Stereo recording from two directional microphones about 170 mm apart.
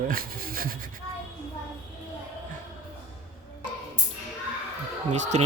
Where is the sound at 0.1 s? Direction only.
60° right (ahead or behind).